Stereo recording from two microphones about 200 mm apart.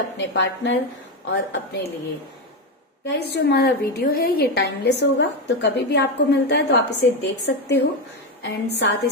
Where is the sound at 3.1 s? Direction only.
55° left (ahead or behind).